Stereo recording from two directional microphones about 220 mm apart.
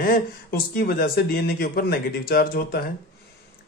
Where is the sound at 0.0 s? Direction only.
40° left (ahead or behind).